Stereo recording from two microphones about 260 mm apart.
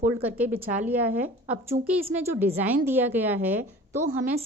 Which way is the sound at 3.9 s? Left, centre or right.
Right.